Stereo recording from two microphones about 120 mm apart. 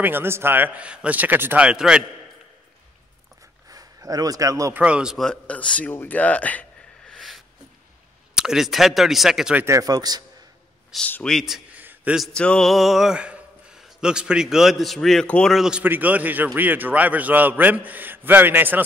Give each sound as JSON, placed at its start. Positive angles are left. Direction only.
{"t": 0.0, "sound": "a man's voice", "side_deg": -20}
{"t": 3.6, "sound": "speech", "side_deg": -30}
{"t": 4.7, "sound": "a man's voice", "side_deg": -10}
{"t": 5.2, "sound": "speech", "side_deg": 10}
{"t": 7.2, "sound": "snort", "side_deg": 0}
{"t": 8.4, "sound": "speech", "side_deg": -5}
{"t": 9.6, "sound": "a man's voice", "side_deg": -25}
{"t": 10.9, "sound": "a man's voice", "side_deg": 0}
{"t": 11.8, "sound": "a sound", "side_deg": -15}
{"t": 12.4, "sound": "a man's voice", "side_deg": 5}
{"t": 15.5, "sound": "a man's voice", "side_deg": -5}